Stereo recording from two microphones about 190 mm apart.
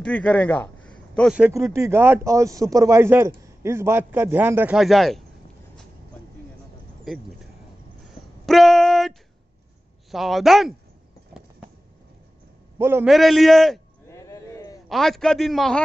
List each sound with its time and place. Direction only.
0.0 s a man's voice: 5° left (ahead or behind)
1.3 s speech: 10° right (ahead or behind)
7.1 s a man's voice: centre (ahead or behind)
8.5 s a sound: centre (ahead or behind)
10.1 s a man's voice: centre (ahead or behind)
12.7 s a man's voice: 10° right (ahead or behind)
13.1 s a man's voice: centre (ahead or behind)
14.0 s music: 15° left (ahead or behind)
14.9 s a man's voice: centre (ahead or behind)